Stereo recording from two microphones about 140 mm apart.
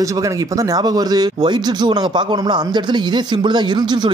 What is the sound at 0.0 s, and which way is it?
Speech, 25° right (ahead or behind).